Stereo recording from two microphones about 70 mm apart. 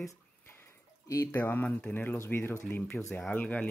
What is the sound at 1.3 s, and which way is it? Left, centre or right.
Speech, left.